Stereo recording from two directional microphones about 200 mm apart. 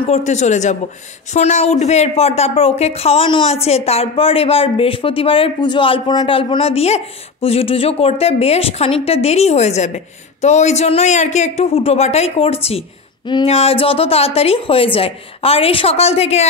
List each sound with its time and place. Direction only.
0.0 s a woman's voice: 35° left (ahead or behind)